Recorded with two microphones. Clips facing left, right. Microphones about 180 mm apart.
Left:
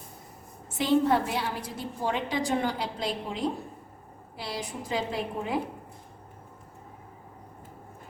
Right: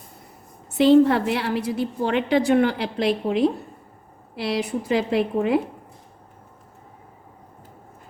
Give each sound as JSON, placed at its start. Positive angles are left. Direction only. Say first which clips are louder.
{"t": 0.7, "sound": "a woman's voice", "louder": "right 9 dB", "side_deg": -70}